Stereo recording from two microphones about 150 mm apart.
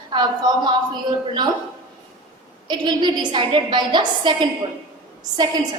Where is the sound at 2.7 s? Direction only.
30° right (ahead or behind).